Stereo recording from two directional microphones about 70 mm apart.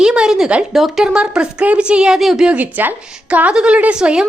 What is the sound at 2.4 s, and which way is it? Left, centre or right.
A woman's voice, right.